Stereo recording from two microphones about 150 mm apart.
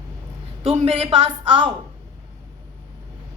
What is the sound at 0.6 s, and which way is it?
A woman's voice, 40° right (ahead or behind).